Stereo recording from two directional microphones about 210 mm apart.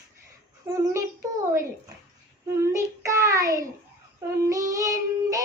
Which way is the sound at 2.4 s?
15° right (ahead or behind).